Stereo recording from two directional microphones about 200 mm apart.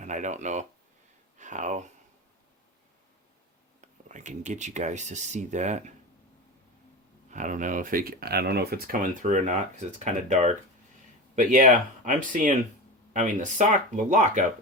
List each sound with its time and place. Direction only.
0.0 s speech: 40° right (ahead or behind)
3.8 s speech: 40° right (ahead or behind)
7.3 s speech: 40° right (ahead or behind)